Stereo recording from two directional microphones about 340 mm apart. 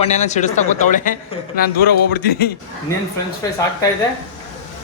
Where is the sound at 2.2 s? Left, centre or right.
Left.